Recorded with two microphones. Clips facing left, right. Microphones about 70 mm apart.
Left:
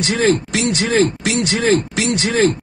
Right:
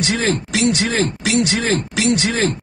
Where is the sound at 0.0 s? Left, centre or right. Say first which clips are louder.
Left 4 dB; left.